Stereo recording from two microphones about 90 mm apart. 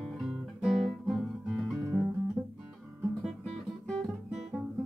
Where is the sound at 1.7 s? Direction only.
25° right (ahead or behind).